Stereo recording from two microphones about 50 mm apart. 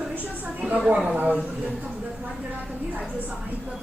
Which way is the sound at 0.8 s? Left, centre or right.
Right.